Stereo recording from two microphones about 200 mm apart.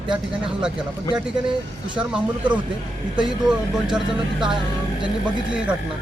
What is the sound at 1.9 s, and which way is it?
Speech, 5° right (ahead or behind).